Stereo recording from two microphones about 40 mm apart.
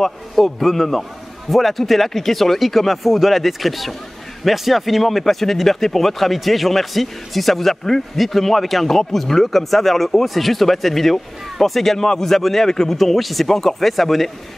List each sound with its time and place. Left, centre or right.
0.0 s speech: centre